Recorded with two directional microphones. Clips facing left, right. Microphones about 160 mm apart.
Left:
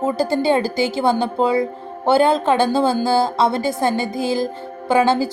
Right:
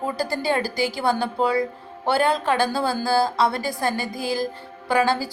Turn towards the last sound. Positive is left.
turn(degrees=25)  # may be behind; listen again after turning